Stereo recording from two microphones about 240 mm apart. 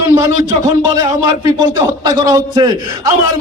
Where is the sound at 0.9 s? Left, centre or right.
Centre.